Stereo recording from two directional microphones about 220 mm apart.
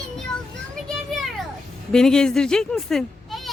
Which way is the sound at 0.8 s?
Centre (ahead or behind).